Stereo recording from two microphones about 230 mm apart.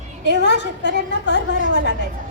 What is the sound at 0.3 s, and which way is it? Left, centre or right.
A woman's voice, left.